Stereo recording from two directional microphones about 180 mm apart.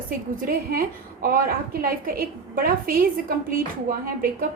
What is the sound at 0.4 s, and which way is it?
A woman's voice, 55° right (ahead or behind).